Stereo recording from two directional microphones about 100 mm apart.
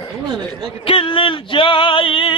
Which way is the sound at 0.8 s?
65° left (ahead or behind).